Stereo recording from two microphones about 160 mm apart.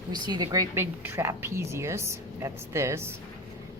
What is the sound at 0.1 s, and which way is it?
A woman's voice, 25° right (ahead or behind).